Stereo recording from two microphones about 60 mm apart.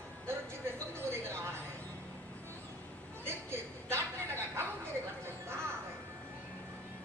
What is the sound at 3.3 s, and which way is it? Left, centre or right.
Speech, right.